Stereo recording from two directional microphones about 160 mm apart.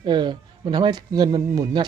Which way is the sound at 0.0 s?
25° right (ahead or behind).